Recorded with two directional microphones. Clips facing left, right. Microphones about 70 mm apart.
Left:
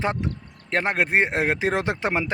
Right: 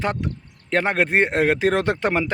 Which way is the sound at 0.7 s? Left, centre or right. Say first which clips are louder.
Right 2 dB; centre.